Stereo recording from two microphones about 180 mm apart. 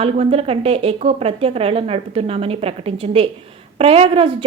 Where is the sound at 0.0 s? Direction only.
35° right (ahead or behind).